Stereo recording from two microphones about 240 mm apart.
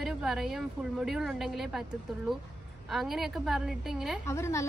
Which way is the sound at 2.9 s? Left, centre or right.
Centre.